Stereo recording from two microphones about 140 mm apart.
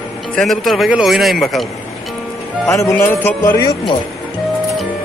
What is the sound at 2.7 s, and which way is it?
Speech, 20° left (ahead or behind).